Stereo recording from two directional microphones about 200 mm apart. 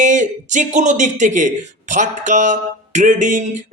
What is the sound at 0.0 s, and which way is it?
Speech, 40° right (ahead or behind).